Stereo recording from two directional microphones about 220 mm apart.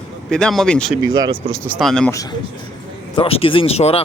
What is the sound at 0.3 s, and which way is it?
Speech, 5° left (ahead or behind).